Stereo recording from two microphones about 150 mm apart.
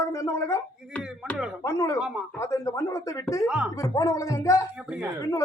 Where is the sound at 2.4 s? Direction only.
20° left (ahead or behind).